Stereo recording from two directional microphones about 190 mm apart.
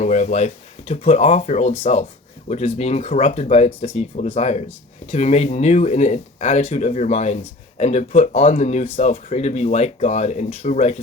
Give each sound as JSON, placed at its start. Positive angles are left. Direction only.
{"t": 0.0, "sound": "speech", "side_deg": 40}